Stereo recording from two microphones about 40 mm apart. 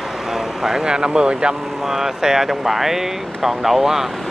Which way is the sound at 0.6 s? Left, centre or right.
Centre.